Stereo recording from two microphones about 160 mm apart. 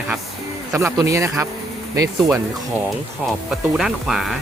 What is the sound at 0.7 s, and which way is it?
Speech, 15° right (ahead or behind).